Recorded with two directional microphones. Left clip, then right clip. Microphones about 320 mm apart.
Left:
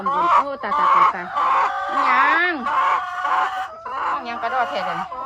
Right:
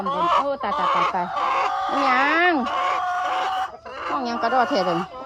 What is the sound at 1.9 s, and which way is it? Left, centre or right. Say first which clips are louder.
Speech: left 3 dB; centre.